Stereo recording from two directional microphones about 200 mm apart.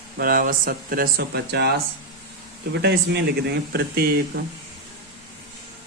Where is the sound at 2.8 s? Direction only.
55° right (ahead or behind).